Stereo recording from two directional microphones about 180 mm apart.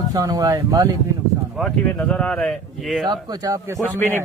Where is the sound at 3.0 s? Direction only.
25° right (ahead or behind).